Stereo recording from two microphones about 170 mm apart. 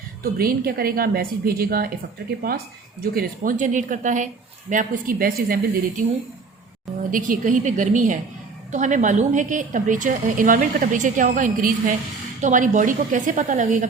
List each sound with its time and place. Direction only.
0.2 s a woman's voice: 60° right (ahead or behind)
3.0 s a woman's voice: 60° right (ahead or behind)
7.1 s a woman's voice: 55° right (ahead or behind)